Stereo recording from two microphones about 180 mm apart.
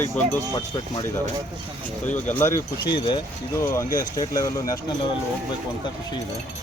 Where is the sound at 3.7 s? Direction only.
20° left (ahead or behind).